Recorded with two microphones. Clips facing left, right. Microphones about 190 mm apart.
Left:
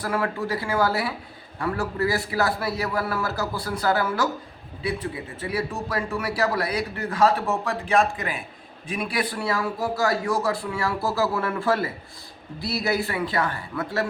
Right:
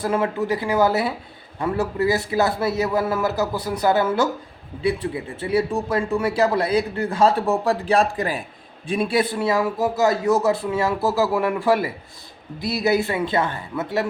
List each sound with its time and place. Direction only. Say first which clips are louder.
0.0 s speech: right 4 dB; 20° right (ahead or behind)
5.4 s speech: right 7 dB; 25° right (ahead or behind)